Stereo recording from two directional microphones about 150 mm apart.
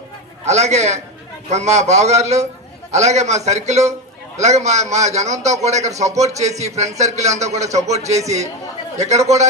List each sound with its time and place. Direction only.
0.4 s a man's voice: 45° right (ahead or behind)